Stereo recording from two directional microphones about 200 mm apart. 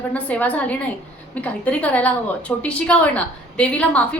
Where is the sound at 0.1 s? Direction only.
5° left (ahead or behind).